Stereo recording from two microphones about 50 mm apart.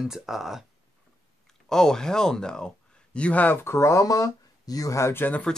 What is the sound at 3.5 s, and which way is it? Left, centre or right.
Speech, left.